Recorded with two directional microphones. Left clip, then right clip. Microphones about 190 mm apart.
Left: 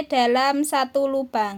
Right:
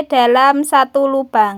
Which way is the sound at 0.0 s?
20° right (ahead or behind).